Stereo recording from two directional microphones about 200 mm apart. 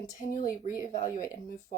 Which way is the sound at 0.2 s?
40° left (ahead or behind).